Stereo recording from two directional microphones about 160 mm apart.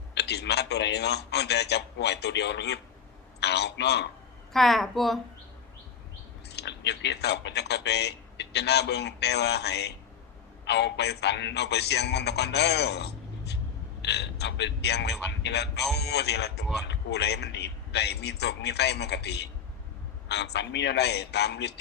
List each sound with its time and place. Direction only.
0.1 s a man's voice: 90° left
4.5 s a woman's voice: centre (ahead or behind)
6.6 s a man's voice: 90° left